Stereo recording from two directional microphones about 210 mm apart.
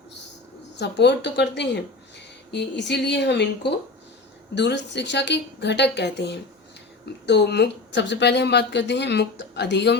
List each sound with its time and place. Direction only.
0.8 s speech: 55° left (ahead or behind)